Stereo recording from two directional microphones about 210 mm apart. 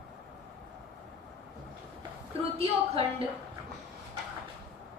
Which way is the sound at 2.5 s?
30° right (ahead or behind).